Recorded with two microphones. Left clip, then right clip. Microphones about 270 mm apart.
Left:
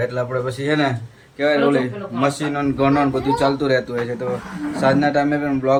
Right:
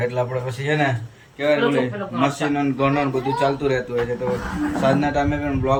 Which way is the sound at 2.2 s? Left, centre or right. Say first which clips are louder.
Left 1 dB; centre.